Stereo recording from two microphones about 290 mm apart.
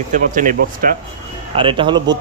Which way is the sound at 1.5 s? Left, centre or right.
Centre.